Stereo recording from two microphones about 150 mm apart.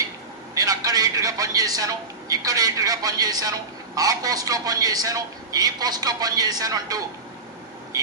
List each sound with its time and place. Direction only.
0.5 s a man's voice: 25° right (ahead or behind)
7.9 s vehicle: 25° right (ahead or behind)